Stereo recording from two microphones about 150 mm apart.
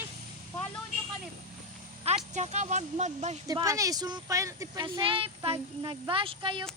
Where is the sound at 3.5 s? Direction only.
25° right (ahead or behind).